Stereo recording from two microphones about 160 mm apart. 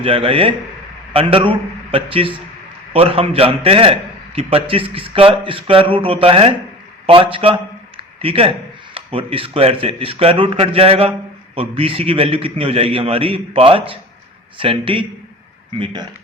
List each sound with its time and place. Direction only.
0.0 s a man's voice: 35° right (ahead or behind)